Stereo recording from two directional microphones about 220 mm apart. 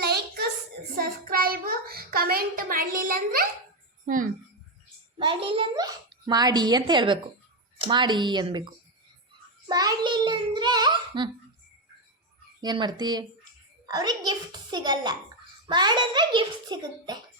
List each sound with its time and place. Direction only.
0.0 s hands: 45° right (ahead or behind)
0.9 s child singing: 40° right (ahead or behind)
4.0 s a child's voice: 40° right (ahead or behind)
5.1 s a child's voice: 20° right (ahead or behind)
9.6 s a child's voice: 15° right (ahead or behind)
12.6 s a child's voice: 20° right (ahead or behind)